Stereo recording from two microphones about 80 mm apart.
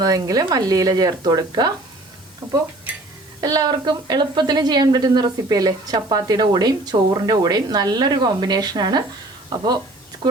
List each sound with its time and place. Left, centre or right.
0.0 s speech: right
2.9 s dishes: centre
3.4 s speech: right